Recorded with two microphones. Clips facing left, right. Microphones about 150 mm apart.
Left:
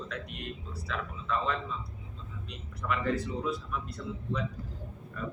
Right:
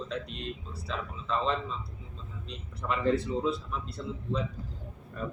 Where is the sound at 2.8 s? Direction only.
25° right (ahead or behind).